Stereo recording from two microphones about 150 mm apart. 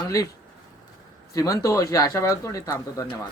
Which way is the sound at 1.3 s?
20° left (ahead or behind).